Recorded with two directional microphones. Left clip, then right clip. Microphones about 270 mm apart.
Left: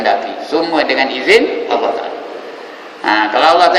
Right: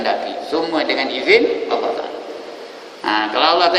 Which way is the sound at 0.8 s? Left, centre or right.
Left.